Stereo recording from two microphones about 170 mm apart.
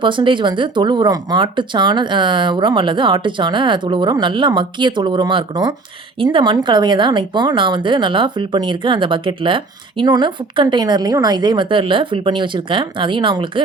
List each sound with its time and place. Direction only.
0.0 s speech: 30° right (ahead or behind)